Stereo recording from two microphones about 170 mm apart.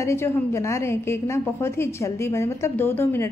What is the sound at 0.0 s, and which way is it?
A woman's voice, 15° left (ahead or behind).